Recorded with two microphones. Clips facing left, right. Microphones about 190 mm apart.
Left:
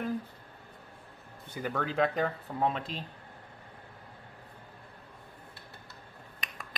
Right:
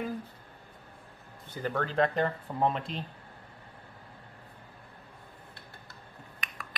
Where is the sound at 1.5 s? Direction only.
10° left (ahead or behind).